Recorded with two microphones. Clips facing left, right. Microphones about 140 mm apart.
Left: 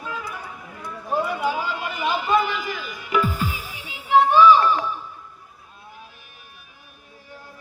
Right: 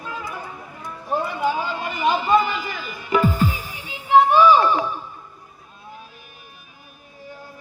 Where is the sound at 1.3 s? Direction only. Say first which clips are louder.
Right 1 dB; 10° left (ahead or behind).